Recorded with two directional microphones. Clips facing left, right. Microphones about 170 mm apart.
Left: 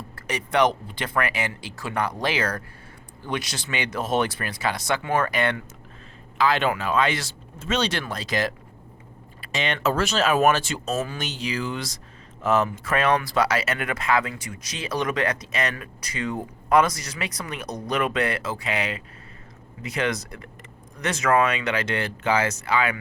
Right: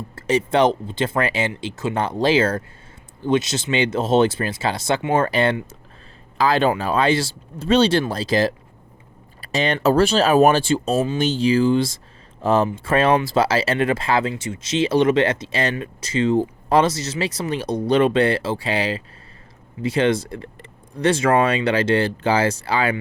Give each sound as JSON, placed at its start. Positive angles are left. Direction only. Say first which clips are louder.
{"t": 0.2, "sound": "speech", "louder": "right 5 dB", "side_deg": -25}